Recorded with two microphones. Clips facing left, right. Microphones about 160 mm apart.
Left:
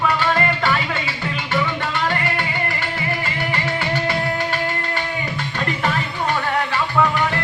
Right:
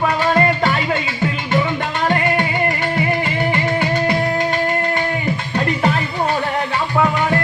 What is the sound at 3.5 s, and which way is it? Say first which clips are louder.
Music: right 2 dB; 20° right (ahead or behind).